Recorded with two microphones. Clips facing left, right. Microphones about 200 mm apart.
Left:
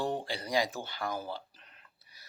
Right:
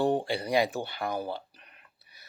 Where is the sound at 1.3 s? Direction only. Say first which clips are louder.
Right 4 dB; 15° right (ahead or behind).